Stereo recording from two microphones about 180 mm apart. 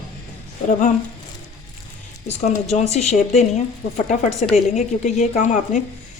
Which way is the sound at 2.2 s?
40° left (ahead or behind).